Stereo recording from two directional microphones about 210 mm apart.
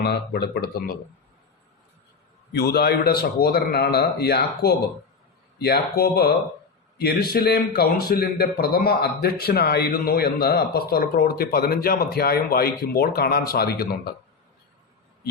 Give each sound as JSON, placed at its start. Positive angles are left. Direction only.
{"t": 0.0, "sound": "a man's voice", "side_deg": 50}
{"t": 2.5, "sound": "a man's voice", "side_deg": 50}